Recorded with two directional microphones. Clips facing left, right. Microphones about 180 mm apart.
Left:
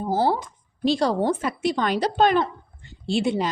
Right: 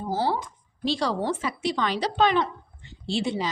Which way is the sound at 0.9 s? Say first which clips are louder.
Left 5 dB; 50° left (ahead or behind).